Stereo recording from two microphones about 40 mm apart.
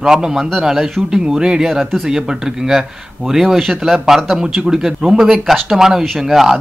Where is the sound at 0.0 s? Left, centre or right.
Centre.